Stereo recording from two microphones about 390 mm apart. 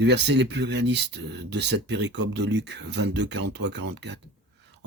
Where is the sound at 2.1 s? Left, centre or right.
Right.